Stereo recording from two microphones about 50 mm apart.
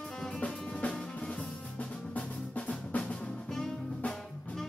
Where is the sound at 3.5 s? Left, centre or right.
Centre.